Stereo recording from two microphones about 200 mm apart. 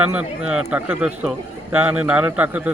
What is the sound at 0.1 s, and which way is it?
A man's voice, 5° right (ahead or behind).